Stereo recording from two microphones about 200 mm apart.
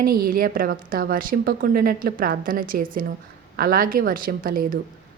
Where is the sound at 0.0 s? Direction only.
45° right (ahead or behind).